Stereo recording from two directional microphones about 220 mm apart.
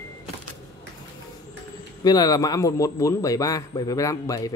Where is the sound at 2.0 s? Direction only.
15° left (ahead or behind).